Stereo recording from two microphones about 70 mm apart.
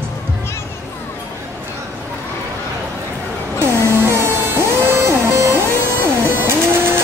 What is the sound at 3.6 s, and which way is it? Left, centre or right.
Music, right.